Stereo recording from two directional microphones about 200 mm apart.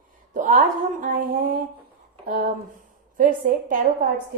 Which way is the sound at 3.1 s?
45° right (ahead or behind).